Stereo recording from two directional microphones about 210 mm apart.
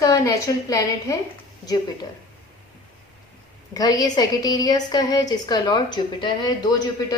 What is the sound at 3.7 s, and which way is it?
A woman's voice, 15° left (ahead or behind).